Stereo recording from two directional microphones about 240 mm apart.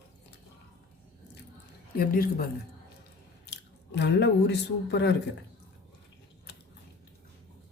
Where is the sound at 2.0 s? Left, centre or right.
Left.